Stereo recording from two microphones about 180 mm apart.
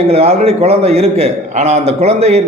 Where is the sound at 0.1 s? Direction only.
35° right (ahead or behind).